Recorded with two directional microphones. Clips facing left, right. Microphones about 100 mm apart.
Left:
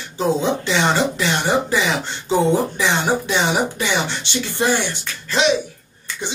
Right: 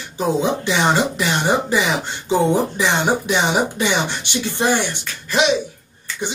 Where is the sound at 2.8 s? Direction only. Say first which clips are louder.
Right 1 dB; 15° right (ahead or behind).